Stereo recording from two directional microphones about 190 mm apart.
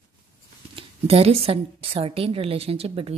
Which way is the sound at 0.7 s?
30° right (ahead or behind).